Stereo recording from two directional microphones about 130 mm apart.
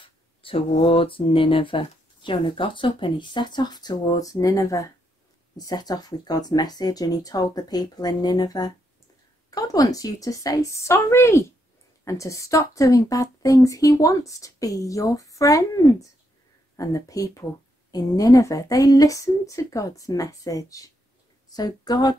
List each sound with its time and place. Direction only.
0.0 s a woman's voice: 45° left (ahead or behind)